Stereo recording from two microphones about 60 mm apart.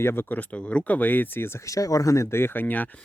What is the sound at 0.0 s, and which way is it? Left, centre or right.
Speech, left.